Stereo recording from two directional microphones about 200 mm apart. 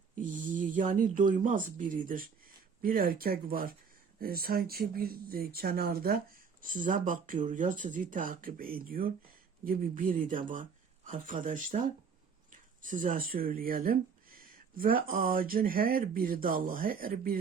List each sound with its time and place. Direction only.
0.2 s speech: 40° right (ahead or behind)